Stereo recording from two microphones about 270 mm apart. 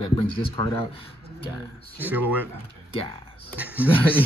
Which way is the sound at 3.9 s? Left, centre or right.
Centre.